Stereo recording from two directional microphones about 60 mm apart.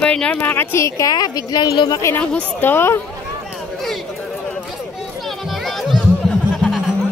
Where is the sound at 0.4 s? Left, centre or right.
Left.